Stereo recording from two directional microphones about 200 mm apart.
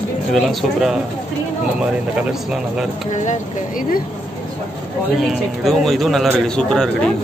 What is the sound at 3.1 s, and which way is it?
Speech, 40° left (ahead or behind).